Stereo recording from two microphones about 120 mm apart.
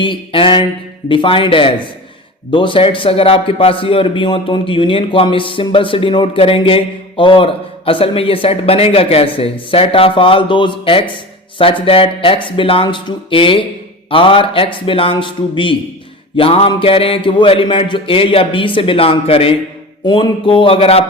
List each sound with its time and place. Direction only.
0.0 s a man's voice: 45° left (ahead or behind)